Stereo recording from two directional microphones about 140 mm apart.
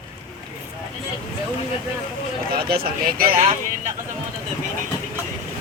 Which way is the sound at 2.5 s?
90° right.